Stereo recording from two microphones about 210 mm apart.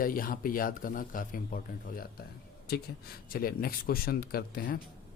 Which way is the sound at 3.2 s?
45° left (ahead or behind).